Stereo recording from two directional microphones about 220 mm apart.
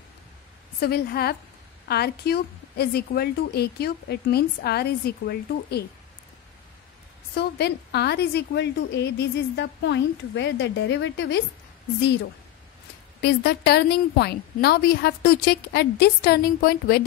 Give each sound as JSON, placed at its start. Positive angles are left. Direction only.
{"t": 0.7, "sound": "a woman's voice", "side_deg": 45}
{"t": 7.3, "sound": "a woman's voice", "side_deg": 50}
{"t": 13.2, "sound": "a woman's voice", "side_deg": 50}